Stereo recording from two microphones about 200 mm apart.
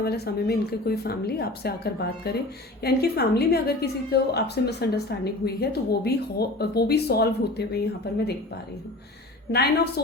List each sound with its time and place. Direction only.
0.0 s a woman's voice: 50° left (ahead or behind)
9.5 s a woman's voice: 55° left (ahead or behind)